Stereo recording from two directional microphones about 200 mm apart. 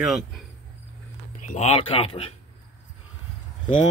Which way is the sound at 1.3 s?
35° left (ahead or behind).